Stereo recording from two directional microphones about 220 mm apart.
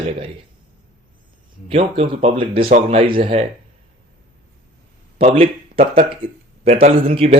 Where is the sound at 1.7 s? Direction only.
25° right (ahead or behind).